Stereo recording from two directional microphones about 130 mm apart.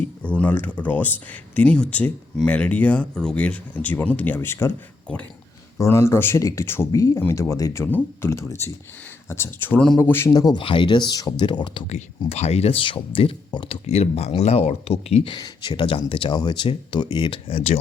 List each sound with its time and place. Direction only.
0.0 s speech: 10° left (ahead or behind)
5.7 s speech: 20° left (ahead or behind)
10.0 s speech: 20° left (ahead or behind)
10.3 s speech: 30° left (ahead or behind)
10.6 s speech: 40° left (ahead or behind)
11.9 s speech: 60° left (ahead or behind)